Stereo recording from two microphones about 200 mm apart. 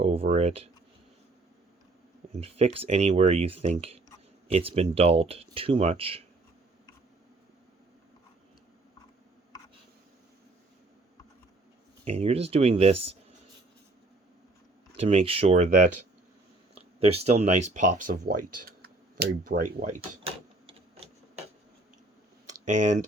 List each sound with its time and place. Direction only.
0.0 s speech: 30° right (ahead or behind)
2.3 s speech: 30° right (ahead or behind)
12.0 s speech: 30° right (ahead or behind)
14.9 s speech: 30° right (ahead or behind)
20.0 s a sound: 30° right (ahead or behind)
22.6 s speech: 40° right (ahead or behind)